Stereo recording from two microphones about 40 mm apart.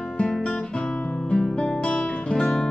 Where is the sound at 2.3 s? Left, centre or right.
Centre.